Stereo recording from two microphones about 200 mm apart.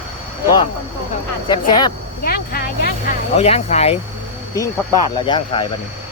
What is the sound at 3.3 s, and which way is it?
Speech, 30° left (ahead or behind).